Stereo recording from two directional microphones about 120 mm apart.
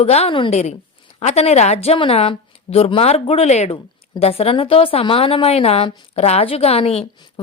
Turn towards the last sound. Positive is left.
turn(degrees=55)  # may be behind; listen again after turning